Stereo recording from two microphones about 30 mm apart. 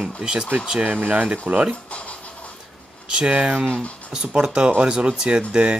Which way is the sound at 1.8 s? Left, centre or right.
Left.